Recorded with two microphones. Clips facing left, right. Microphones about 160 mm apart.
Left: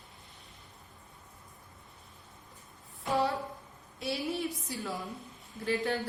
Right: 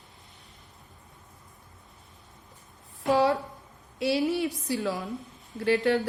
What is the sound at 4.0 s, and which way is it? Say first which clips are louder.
A woman's voice: right 8 dB; 80° right.